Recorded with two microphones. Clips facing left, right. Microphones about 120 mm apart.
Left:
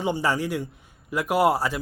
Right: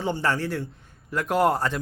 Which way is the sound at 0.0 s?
10° left (ahead or behind).